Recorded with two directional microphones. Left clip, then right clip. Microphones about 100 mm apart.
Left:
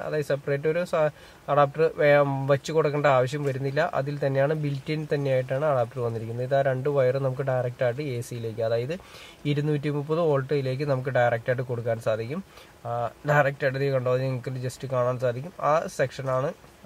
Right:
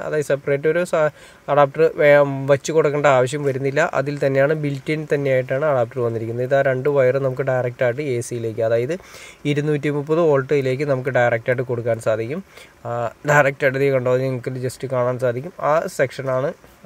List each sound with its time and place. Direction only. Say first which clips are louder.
0.0 s speech: right 7 dB; 35° right (ahead or behind)
12.8 s speech: right 6 dB; 40° right (ahead or behind)